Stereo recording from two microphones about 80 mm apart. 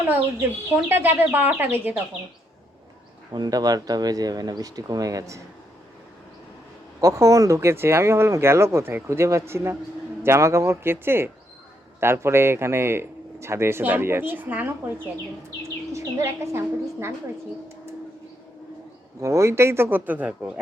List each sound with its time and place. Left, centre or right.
0.4 s speech: right
3.3 s speech: right
7.0 s speech: right
15.9 s speech: right
19.2 s speech: right; by 20.5 s centre